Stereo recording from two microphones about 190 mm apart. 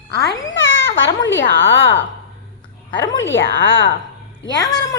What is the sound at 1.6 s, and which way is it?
Speech, 85° left.